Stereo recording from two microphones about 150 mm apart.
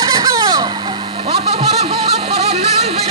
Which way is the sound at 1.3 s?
40° right (ahead or behind).